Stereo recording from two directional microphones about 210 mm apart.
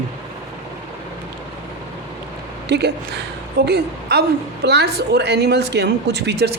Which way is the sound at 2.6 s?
50° right (ahead or behind).